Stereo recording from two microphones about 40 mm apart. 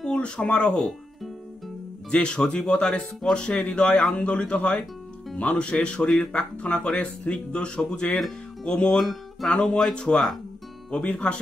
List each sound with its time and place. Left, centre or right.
0.4 s speech: left
2.0 s speech: left
8.9 s speech: centre
9.9 s speech: centre